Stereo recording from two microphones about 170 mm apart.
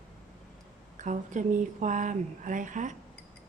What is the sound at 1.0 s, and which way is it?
Speech, 50° right (ahead or behind).